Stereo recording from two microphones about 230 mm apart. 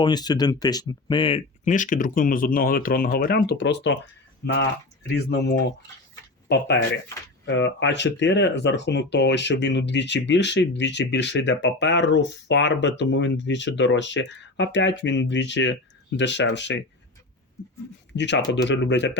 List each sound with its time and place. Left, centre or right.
0.0 s speech: centre; by 16.7 s left
18.2 s speech: left